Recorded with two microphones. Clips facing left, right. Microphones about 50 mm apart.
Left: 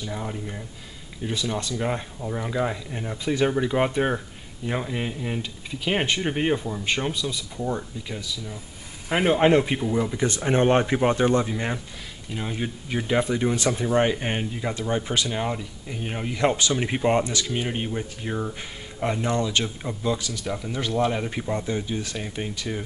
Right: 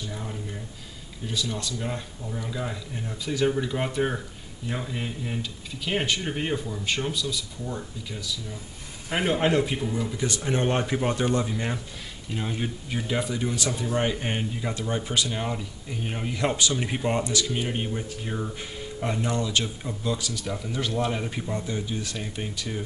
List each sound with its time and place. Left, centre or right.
0.0 s speech: left
9.1 s speech: centre
9.9 s speech: left; by 13.0 s centre
13.0 s speech: centre
13.8 s speech: centre
22.1 s speech: centre